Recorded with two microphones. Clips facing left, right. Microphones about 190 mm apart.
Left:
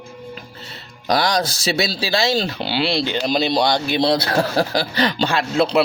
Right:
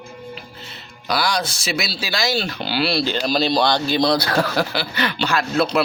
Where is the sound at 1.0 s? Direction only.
40° left (ahead or behind).